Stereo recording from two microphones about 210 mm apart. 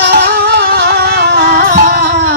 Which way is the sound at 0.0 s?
50° right (ahead or behind).